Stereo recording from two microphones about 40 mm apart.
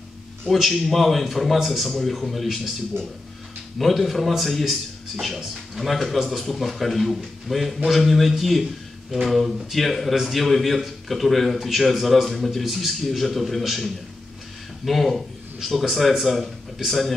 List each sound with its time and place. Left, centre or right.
0.6 s speech: centre
3.7 s speech: centre